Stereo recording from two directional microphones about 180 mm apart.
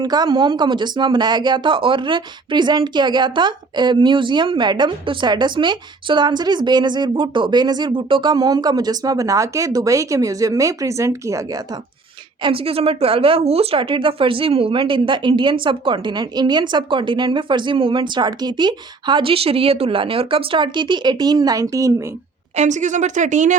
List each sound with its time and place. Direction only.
0.0 s speech: 25° right (ahead or behind)
12.4 s speech: 30° right (ahead or behind)
22.5 s speech: 40° right (ahead or behind)